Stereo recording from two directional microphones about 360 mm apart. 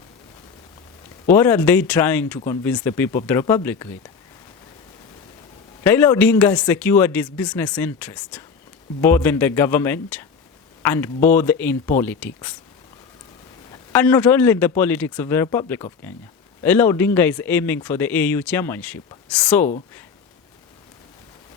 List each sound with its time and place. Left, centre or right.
1.3 s speech: centre
5.8 s speech: centre
13.9 s speech: centre